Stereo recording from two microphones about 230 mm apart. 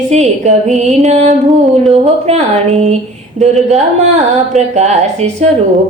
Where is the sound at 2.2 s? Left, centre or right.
Right.